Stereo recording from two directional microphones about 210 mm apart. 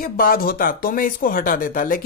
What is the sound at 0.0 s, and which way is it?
Speech, 45° left (ahead or behind).